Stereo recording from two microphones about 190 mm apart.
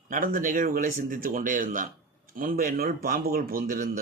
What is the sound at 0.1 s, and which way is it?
Speech, 45° right (ahead or behind).